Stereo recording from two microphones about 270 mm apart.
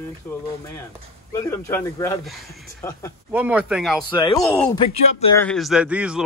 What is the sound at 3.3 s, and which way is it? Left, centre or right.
Speech, centre.